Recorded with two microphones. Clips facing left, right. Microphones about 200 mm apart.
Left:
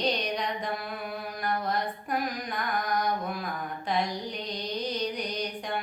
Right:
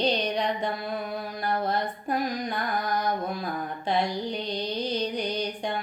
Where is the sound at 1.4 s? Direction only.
30° right (ahead or behind).